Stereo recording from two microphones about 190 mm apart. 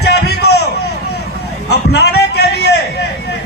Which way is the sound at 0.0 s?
60° left (ahead or behind).